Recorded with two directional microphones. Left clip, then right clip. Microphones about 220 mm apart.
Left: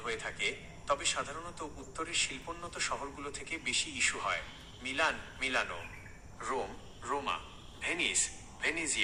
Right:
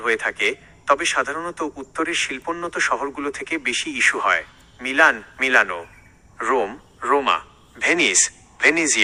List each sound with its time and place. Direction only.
0.0 s a man's voice: 40° right (ahead or behind)